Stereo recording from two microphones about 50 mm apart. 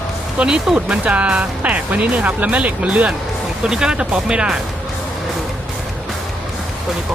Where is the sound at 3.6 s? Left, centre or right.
Centre.